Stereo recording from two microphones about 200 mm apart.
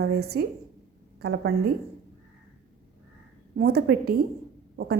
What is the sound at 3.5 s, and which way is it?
Speech, 55° right (ahead or behind).